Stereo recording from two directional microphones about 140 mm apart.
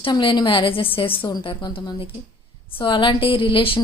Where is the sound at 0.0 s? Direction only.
35° left (ahead or behind).